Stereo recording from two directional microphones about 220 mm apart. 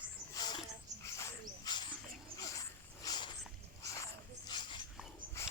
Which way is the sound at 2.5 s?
15° left (ahead or behind).